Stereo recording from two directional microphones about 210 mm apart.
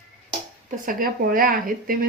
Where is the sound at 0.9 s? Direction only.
40° right (ahead or behind).